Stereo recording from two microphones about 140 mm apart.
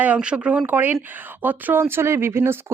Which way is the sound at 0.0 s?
10° right (ahead or behind).